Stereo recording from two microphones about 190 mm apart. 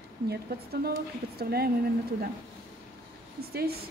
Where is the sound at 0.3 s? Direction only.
55° right (ahead or behind).